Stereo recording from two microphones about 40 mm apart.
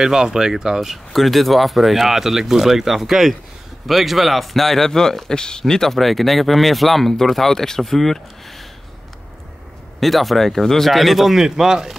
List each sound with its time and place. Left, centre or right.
0.0 s speech: centre
0.7 s speech: centre
9.9 s speech: centre